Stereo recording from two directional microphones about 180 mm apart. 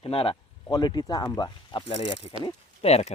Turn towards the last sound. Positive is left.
turn(degrees=35)  # may be behind; listen again after turning